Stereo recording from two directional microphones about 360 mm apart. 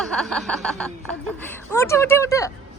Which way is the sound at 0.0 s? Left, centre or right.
Centre.